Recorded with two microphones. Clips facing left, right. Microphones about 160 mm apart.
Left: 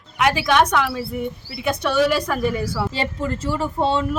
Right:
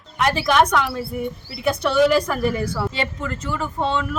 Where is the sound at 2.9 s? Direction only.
35° left (ahead or behind).